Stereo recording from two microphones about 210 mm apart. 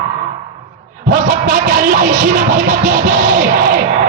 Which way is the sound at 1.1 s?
45° right (ahead or behind).